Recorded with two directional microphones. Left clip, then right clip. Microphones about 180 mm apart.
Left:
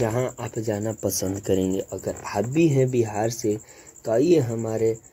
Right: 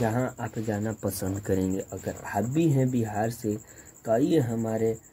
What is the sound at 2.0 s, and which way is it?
Speech, 30° left (ahead or behind).